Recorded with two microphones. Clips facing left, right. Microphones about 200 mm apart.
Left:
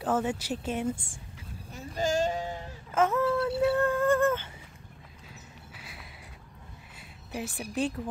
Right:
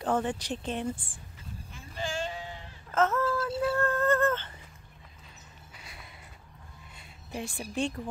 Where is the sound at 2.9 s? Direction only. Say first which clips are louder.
Left 2 dB; 15° left (ahead or behind).